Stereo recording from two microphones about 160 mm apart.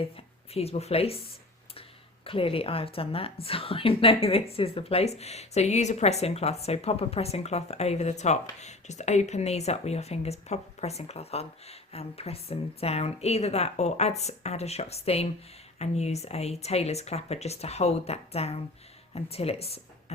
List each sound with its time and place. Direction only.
0.0 s speech: 40° left (ahead or behind)
2.2 s a woman's voice: 35° left (ahead or behind)